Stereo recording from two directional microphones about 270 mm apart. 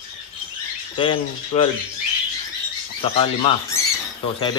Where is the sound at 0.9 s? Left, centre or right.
Centre.